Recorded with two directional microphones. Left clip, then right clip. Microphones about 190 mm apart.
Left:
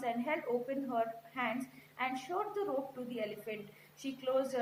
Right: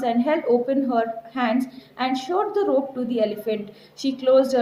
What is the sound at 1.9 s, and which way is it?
Speech, 50° right (ahead or behind).